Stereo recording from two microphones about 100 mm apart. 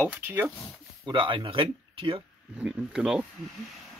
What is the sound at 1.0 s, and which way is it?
Speech, 55° right (ahead or behind).